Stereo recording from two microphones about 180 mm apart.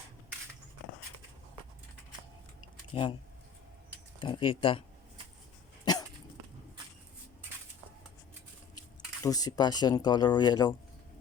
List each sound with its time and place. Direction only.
2.9 s speech: 30° left (ahead or behind)
4.2 s speech: 25° left (ahead or behind)
5.8 s dog: 20° left (ahead or behind)
9.2 s speech: 20° left (ahead or behind)